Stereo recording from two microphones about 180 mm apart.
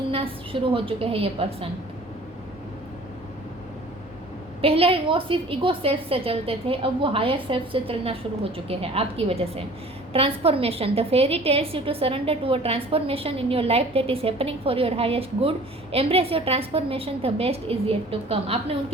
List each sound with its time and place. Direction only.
0.1 s a woman's voice: 30° right (ahead or behind)
4.6 s a woman's voice: 30° right (ahead or behind)